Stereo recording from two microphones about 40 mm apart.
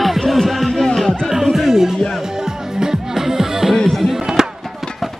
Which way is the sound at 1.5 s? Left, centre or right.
Centre.